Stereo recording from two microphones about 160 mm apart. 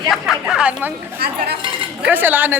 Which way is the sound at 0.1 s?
5° right (ahead or behind).